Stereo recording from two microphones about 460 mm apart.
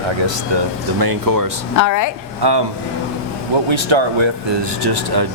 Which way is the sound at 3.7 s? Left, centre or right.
Right.